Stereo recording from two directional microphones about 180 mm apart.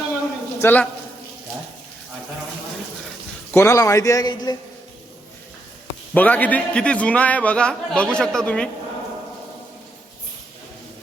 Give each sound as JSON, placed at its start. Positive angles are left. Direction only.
{"t": 0.6, "sound": "a man's voice", "side_deg": 10}
{"t": 3.5, "sound": "a man's voice", "side_deg": 15}
{"t": 6.1, "sound": "a man's voice", "side_deg": 10}